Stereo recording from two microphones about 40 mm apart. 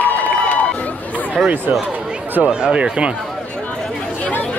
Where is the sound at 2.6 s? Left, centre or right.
Right.